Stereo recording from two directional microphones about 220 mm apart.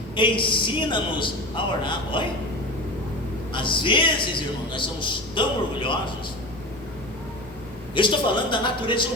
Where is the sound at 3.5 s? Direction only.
20° left (ahead or behind).